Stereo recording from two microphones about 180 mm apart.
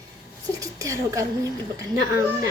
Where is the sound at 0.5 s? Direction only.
20° right (ahead or behind).